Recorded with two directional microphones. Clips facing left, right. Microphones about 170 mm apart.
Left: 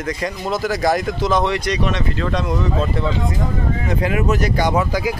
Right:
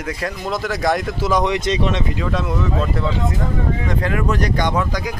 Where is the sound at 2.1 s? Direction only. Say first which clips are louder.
Left 1 dB; 5° right (ahead or behind).